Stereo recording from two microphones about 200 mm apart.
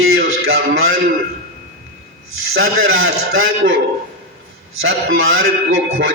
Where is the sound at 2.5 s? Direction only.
80° right.